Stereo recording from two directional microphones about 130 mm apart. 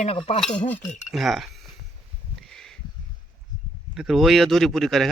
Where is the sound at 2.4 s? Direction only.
5° left (ahead or behind).